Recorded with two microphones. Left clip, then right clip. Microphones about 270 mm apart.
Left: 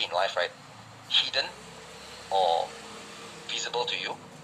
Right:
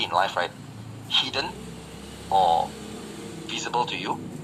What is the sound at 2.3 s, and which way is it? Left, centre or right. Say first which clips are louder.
Speech: right 5 dB; right.